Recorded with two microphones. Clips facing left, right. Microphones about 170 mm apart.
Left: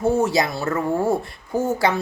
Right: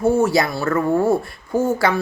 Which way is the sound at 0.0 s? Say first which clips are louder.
Right 3 dB; 20° left (ahead or behind).